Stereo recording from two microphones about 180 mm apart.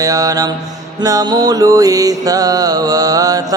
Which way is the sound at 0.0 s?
20° right (ahead or behind).